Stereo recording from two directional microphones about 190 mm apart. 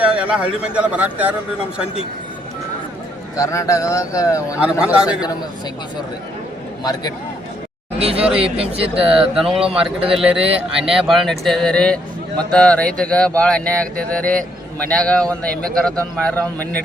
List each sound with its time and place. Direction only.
0.0 s speech: 5° right (ahead or behind)
3.3 s speech: 15° left (ahead or behind)
4.6 s speech: 5° right (ahead or behind)
7.9 s speech: 30° right (ahead or behind)
8.2 s speech: 5° right (ahead or behind)
8.5 s speech: 30° right (ahead or behind)
9.0 s speech: 5° right (ahead or behind)